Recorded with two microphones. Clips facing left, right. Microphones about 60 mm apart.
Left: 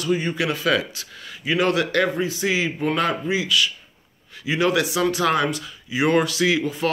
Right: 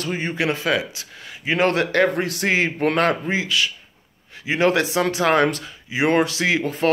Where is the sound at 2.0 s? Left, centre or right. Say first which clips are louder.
Right 2 dB; right.